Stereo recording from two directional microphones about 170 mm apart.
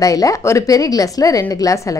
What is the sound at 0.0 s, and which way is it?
A woman's voice, 20° left (ahead or behind).